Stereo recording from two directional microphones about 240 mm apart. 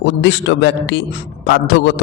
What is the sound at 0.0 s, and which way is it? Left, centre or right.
A man's voice, left.